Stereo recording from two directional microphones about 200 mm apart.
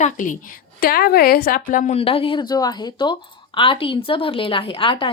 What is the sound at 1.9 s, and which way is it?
A woman's voice, 30° left (ahead or behind).